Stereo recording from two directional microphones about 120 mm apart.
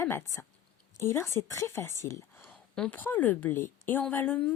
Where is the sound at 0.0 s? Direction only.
25° left (ahead or behind).